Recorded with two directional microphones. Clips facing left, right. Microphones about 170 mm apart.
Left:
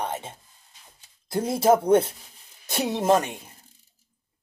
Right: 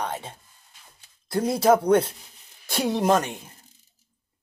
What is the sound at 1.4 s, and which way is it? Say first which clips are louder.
Speech: right 1 dB; 25° left (ahead or behind).